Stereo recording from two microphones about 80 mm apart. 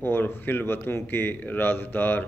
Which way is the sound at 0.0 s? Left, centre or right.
Left.